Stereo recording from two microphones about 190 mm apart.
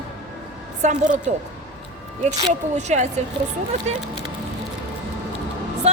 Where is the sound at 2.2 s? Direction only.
40° right (ahead or behind).